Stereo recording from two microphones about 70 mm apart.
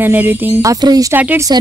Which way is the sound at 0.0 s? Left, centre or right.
Right.